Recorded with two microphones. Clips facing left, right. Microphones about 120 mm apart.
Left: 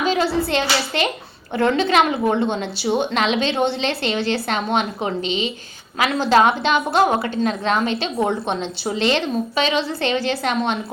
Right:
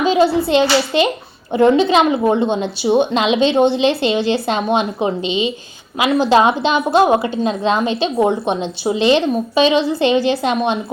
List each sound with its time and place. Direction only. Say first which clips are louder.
0.0 s a woman's voice: right 6 dB; 15° right (ahead or behind)